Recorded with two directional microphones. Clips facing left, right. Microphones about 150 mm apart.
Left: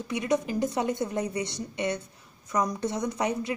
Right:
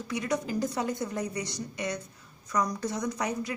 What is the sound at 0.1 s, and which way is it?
Speech, 20° left (ahead or behind).